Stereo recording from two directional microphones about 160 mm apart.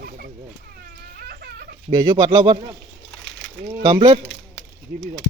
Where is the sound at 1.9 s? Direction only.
25° right (ahead or behind).